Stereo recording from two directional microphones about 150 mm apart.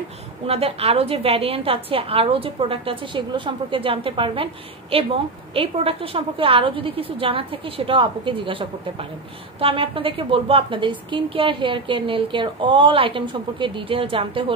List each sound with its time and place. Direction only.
0.5 s a woman's voice: 40° right (ahead or behind)